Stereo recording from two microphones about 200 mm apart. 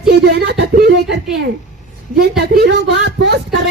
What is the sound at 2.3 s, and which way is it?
A man's voice, 55° right (ahead or behind).